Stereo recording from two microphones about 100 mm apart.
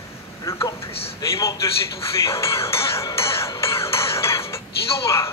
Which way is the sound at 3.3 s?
30° left (ahead or behind).